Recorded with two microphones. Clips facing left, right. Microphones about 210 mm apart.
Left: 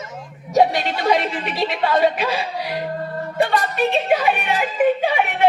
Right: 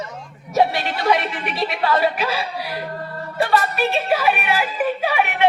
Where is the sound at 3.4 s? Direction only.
20° left (ahead or behind).